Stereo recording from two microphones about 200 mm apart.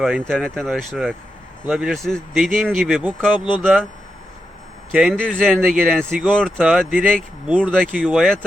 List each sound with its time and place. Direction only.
0.0 s speech: centre (ahead or behind)
3.3 s speech: 25° left (ahead or behind)
3.6 s speech: 5° left (ahead or behind)
4.9 s speech: centre (ahead or behind)